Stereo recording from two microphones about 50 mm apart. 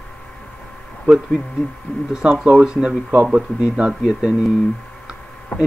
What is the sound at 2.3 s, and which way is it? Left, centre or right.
Speech, right.